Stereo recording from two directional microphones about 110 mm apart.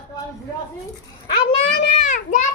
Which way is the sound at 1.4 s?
60° left (ahead or behind).